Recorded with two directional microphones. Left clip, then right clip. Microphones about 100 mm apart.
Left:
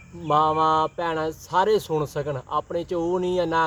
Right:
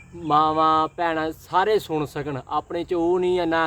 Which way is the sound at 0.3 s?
10° right (ahead or behind).